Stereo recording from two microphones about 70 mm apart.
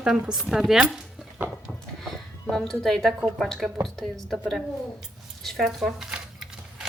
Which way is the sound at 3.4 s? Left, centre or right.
Centre.